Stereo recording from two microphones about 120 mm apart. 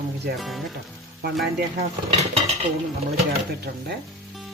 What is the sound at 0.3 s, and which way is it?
Speech, centre (ahead or behind).